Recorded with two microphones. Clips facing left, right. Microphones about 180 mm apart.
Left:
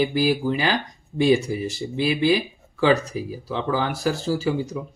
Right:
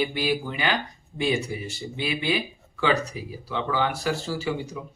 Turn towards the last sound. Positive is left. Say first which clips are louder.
# left 4 dB
turn(degrees=35)  # may be behind; listen again after turning